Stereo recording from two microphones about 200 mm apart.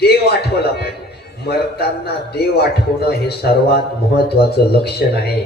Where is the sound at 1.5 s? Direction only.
55° left (ahead or behind).